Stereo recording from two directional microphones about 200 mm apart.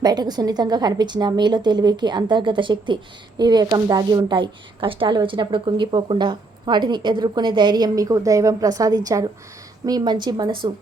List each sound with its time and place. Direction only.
0.0 s a woman's voice: 20° right (ahead or behind)